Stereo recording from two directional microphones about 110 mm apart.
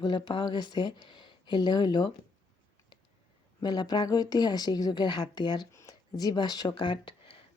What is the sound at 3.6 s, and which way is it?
A woman's voice, 40° left (ahead or behind).